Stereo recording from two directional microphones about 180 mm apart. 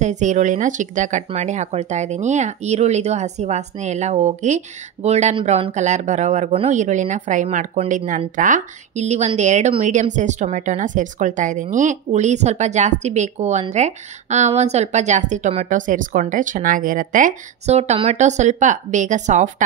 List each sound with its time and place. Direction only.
0.0 s speech: 40° right (ahead or behind)